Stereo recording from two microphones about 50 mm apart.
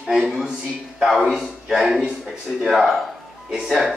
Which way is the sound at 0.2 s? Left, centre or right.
Centre.